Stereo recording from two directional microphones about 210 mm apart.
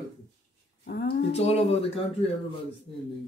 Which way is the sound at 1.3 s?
30° left (ahead or behind).